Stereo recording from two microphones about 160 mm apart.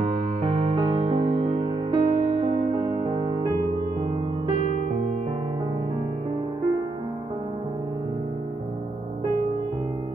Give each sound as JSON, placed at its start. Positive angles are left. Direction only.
{"t": 0.0, "sound": "music", "side_deg": -45}
{"t": 0.7, "sound": "music", "side_deg": -30}